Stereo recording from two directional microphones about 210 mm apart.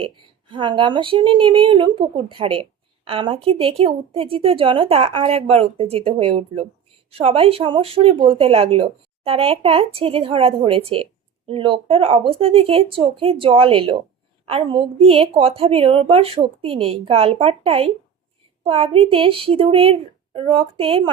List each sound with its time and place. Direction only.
0.0 s speech: 25° right (ahead or behind)